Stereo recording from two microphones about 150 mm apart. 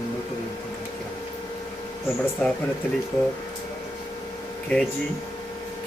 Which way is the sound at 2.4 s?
5° left (ahead or behind).